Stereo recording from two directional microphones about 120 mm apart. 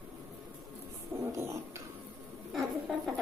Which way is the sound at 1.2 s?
25° right (ahead or behind).